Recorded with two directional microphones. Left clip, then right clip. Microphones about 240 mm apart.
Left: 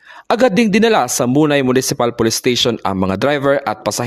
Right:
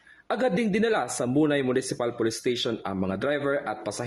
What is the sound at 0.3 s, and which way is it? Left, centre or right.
Speech, left.